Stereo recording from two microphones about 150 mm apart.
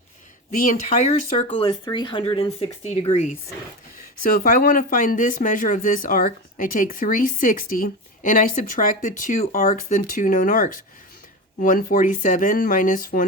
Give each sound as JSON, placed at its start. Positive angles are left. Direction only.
{"t": 0.7, "sound": "speech", "side_deg": 50}
{"t": 1.5, "sound": "speech", "side_deg": 35}
{"t": 4.2, "sound": "speech", "side_deg": 60}